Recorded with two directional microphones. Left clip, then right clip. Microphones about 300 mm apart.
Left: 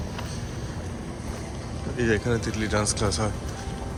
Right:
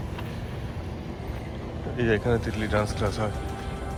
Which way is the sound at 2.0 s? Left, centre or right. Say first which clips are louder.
Even; centre.